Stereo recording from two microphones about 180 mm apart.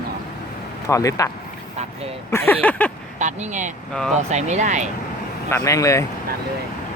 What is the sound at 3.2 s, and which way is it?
Speech, 45° right (ahead or behind).